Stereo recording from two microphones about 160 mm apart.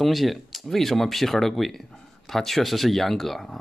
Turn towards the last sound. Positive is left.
turn(degrees=0)  # may be behind; listen again after turning